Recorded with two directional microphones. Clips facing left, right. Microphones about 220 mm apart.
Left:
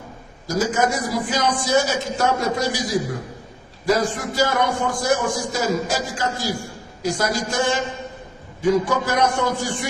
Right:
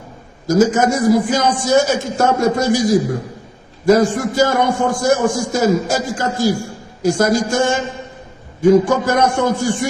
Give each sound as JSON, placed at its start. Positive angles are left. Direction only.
{"t": 0.4, "sound": "a man's voice", "side_deg": -45}
{"t": 3.8, "sound": "a man's voice", "side_deg": -45}